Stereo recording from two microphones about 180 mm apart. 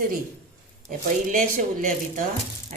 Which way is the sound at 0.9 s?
45° right (ahead or behind).